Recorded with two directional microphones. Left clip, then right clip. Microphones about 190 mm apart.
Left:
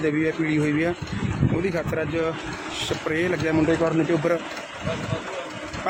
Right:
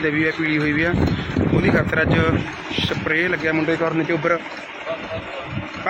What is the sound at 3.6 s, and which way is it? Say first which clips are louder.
Speech: right 1 dB; 20° left (ahead or behind).